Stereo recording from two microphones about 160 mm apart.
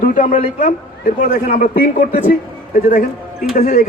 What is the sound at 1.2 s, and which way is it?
A man's voice, 60° left (ahead or behind).